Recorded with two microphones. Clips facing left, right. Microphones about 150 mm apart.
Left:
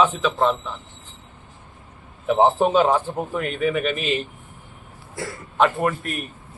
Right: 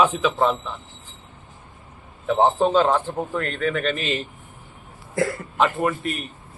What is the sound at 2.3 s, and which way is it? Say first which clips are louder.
A man's voice: left 1 dB; 10° left (ahead or behind).